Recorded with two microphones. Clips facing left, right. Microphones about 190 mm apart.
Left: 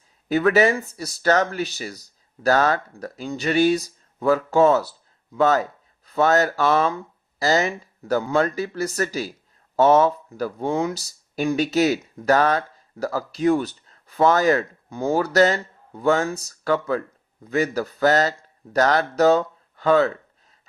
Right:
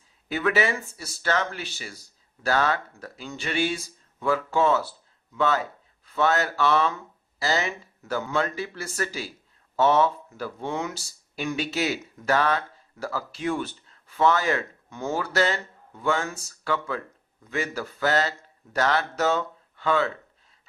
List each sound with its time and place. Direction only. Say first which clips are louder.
0.3 s speech: left 7 dB; 40° left (ahead or behind)